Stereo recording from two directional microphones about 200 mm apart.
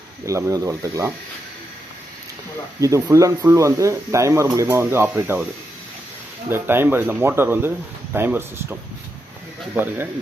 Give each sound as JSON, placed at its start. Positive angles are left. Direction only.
{"t": 0.3, "sound": "speech", "side_deg": -15}
{"t": 2.8, "sound": "speech", "side_deg": -15}
{"t": 6.5, "sound": "speech", "side_deg": -10}